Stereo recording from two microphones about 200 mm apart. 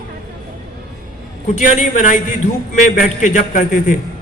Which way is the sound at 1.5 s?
40° left (ahead or behind).